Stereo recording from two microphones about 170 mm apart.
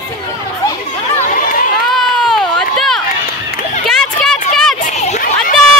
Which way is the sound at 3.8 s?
Centre (ahead or behind).